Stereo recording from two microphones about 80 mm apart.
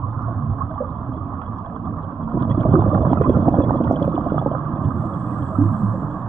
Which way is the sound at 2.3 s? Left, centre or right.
Centre.